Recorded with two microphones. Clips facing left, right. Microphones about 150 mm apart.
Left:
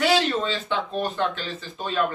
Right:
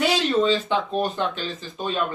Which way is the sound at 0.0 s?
20° right (ahead or behind).